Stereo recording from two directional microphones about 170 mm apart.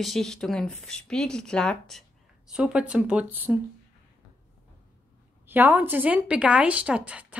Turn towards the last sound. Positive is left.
turn(degrees=-10)  # may be behind; listen again after turning